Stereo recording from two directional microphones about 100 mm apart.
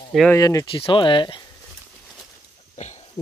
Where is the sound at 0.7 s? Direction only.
60° left (ahead or behind).